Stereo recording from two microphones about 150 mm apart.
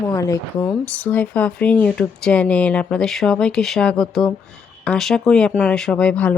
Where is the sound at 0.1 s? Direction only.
20° left (ahead or behind).